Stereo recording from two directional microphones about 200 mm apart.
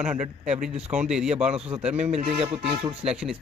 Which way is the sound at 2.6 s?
30° right (ahead or behind).